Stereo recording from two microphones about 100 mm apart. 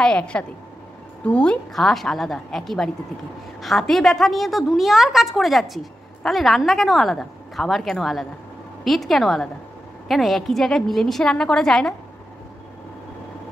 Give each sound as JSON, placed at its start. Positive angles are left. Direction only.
{"t": 0.0, "sound": "a woman's voice", "side_deg": 10}